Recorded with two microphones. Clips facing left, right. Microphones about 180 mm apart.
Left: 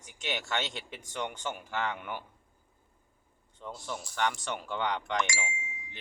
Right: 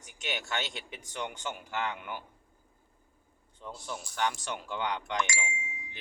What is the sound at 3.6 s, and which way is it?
Speech, 5° right (ahead or behind).